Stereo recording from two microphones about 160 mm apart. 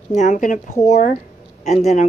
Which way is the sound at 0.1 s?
50° left (ahead or behind).